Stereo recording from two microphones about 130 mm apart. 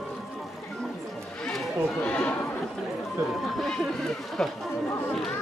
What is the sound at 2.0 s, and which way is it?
Neigh, 10° left (ahead or behind).